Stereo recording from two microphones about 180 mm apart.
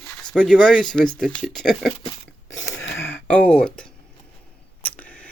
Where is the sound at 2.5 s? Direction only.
90° left.